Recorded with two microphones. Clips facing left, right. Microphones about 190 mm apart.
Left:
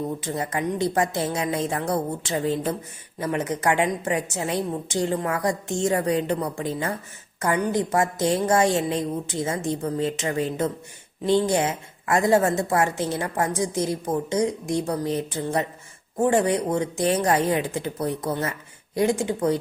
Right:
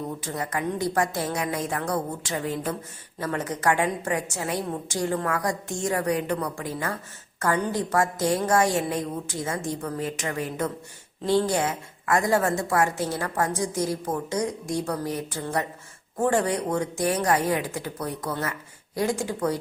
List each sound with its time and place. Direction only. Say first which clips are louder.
0.2 s a woman's voice: left 3 dB; 20° left (ahead or behind)